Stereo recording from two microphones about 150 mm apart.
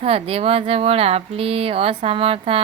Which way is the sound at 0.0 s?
40° right (ahead or behind).